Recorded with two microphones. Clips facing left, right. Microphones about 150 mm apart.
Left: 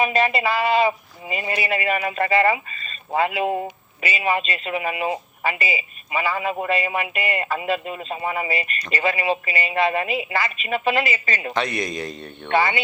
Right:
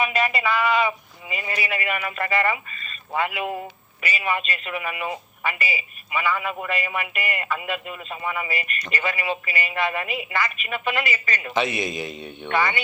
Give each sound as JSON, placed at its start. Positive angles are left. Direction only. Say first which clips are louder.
{"t": 0.0, "sound": "speech", "louder": "left 3 dB", "side_deg": 30}
{"t": 11.5, "sound": "a man's voice", "louder": "right 2 dB", "side_deg": -5}
{"t": 12.5, "sound": "speech", "louder": "left 3 dB", "side_deg": 30}